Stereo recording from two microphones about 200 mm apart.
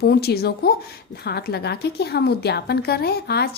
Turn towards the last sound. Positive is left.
turn(degrees=55)  # may be behind; listen again after turning